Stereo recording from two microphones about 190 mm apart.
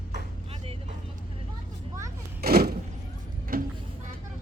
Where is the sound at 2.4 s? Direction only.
55° right (ahead or behind).